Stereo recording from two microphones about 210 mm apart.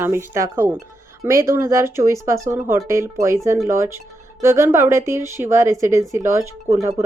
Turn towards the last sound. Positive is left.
turn(degrees=-15)  # may be behind; listen again after turning